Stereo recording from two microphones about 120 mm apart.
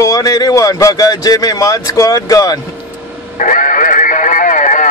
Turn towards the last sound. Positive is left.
turn(degrees=90)